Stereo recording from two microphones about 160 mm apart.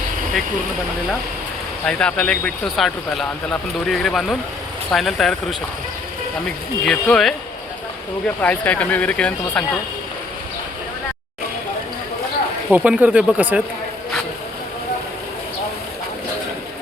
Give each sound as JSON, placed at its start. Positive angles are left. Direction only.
{"t": 1.8, "sound": "speech", "side_deg": 5}
{"t": 6.8, "sound": "speech", "side_deg": 5}
{"t": 8.4, "sound": "speech", "side_deg": 10}
{"t": 12.7, "sound": "speech", "side_deg": -10}